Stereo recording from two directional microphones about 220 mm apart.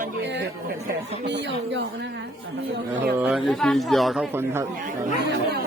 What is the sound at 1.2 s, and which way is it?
Speech, 55° right (ahead or behind).